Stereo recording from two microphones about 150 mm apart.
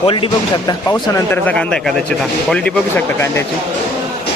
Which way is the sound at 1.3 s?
10° left (ahead or behind).